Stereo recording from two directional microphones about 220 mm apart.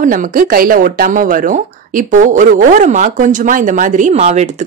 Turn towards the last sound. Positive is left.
turn(degrees=-30)  # may be behind; listen again after turning